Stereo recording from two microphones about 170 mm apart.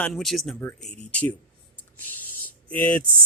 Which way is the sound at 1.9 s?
10° left (ahead or behind).